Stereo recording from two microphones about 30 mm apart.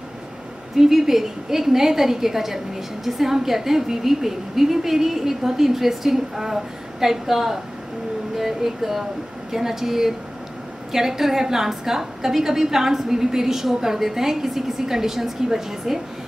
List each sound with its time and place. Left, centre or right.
0.7 s a woman's voice: centre